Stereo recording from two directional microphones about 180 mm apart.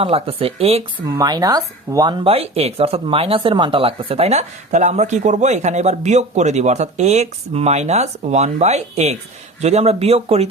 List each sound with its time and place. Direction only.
0.0 s speech: 30° right (ahead or behind)
1.0 s speech: 20° right (ahead or behind)